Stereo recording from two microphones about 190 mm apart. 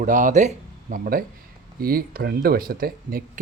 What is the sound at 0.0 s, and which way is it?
Speech, 40° right (ahead or behind).